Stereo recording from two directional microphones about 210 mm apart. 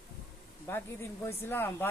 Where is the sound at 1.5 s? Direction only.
10° left (ahead or behind).